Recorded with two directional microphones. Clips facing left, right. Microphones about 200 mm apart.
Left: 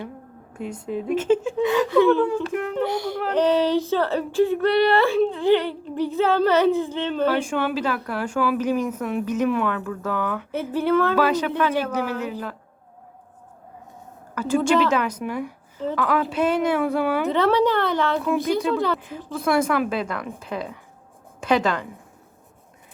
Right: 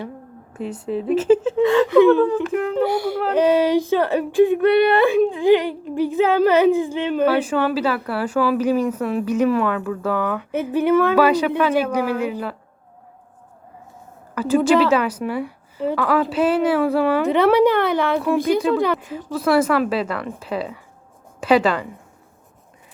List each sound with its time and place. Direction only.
0.9 s speech: 35° right (ahead or behind)
1.6 s a woman's voice: centre (ahead or behind)
1.9 s speech: 15° right (ahead or behind)
2.2 s speech: centre (ahead or behind)
14.5 s a woman's voice: 5° right (ahead or behind)